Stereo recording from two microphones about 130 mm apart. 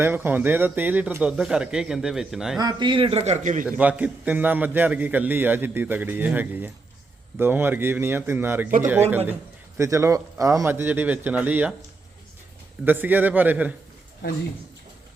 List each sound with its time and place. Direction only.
0.0 s a man's voice: 15° right (ahead or behind)
2.6 s a man's voice: 35° right (ahead or behind)
3.4 s a man's voice: 70° right (ahead or behind)
3.7 s a man's voice: 10° right (ahead or behind)
9.7 s a man's voice: 20° right (ahead or behind)
12.8 s a man's voice: 15° right (ahead or behind)